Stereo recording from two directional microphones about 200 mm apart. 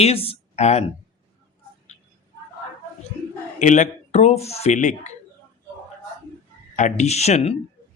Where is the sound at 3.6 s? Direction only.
40° left (ahead or behind).